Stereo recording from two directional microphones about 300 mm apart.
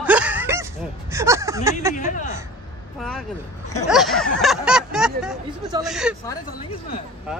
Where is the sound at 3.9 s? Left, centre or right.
Centre.